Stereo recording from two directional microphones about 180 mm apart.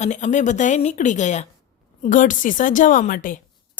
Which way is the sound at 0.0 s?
40° left (ahead or behind).